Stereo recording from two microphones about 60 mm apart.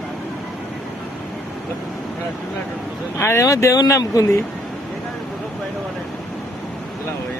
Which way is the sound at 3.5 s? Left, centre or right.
Left.